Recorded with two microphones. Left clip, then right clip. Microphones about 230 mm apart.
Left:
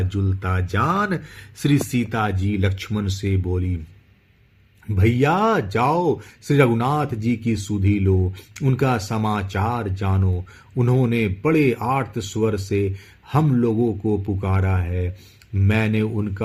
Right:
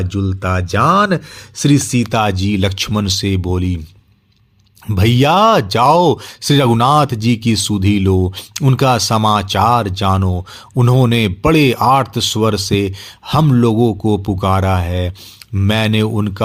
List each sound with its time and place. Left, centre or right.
0.0 s speech: right
2.2 s speech: right
4.9 s speech: right